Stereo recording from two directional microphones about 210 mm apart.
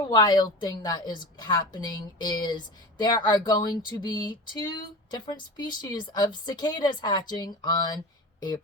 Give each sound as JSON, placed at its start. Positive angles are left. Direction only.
{"t": 0.0, "sound": "speech", "side_deg": 20}